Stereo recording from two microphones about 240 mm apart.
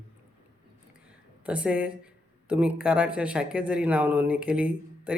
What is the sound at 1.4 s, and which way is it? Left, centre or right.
Speech, centre.